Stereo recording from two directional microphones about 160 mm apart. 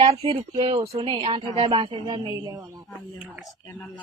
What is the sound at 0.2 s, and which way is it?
Speech, 35° right (ahead or behind).